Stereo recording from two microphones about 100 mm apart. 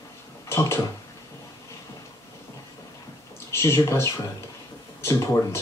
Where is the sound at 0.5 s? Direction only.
25° left (ahead or behind).